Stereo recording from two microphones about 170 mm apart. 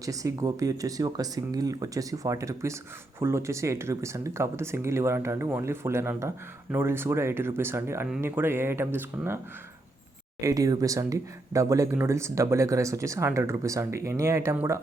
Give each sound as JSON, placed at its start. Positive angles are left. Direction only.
{"t": 0.0, "sound": "speech", "side_deg": -20}
{"t": 10.4, "sound": "speech", "side_deg": -20}